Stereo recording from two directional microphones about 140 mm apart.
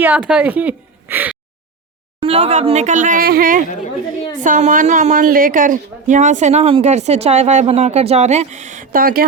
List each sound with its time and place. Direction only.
0.0 s a woman's voice: 10° right (ahead or behind)
2.2 s speech: 50° right (ahead or behind); by 3.7 s 80° right
4.4 s speech: 70° right (ahead or behind); by 9.2 s 90° right